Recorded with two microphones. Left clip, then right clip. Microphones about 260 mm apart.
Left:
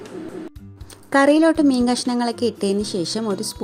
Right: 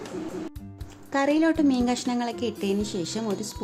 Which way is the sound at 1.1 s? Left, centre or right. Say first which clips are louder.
Left 8 dB; left.